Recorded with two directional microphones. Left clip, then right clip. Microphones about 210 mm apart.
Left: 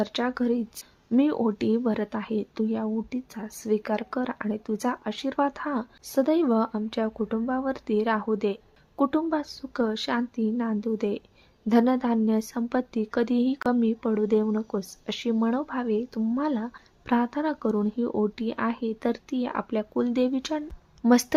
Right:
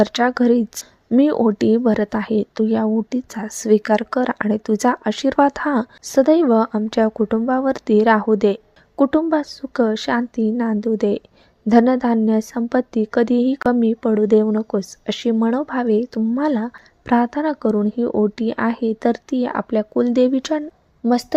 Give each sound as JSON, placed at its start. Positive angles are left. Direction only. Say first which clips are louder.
{"t": 0.0, "sound": "a woman's voice", "louder": "right 11 dB", "side_deg": -30}
{"t": 21.0, "sound": "a woman's voice", "louder": "right 3 dB", "side_deg": -10}